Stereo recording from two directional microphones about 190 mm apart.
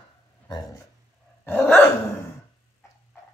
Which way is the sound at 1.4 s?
10° left (ahead or behind).